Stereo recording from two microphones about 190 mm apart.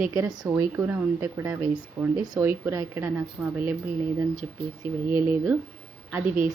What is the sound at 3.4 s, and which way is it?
Speech, 5° right (ahead or behind).